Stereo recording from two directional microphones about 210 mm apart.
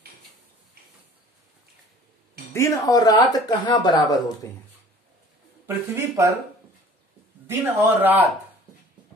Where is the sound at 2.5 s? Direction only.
15° left (ahead or behind).